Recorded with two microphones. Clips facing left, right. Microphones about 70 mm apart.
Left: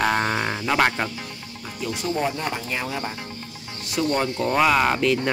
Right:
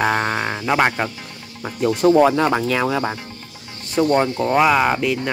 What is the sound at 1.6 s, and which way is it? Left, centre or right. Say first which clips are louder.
Speech: right 12 dB; right.